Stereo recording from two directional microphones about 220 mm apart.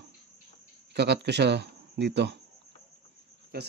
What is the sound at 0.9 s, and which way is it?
Speech, 50° right (ahead or behind).